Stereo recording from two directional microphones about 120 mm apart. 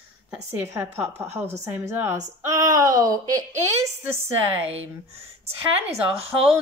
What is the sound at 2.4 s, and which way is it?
A woman's voice, 30° right (ahead or behind).